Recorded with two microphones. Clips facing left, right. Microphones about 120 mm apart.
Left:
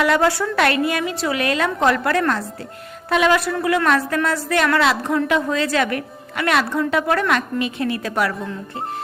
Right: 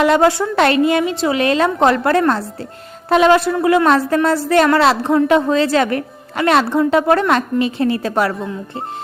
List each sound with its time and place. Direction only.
0.0 s a woman's voice: 25° right (ahead or behind)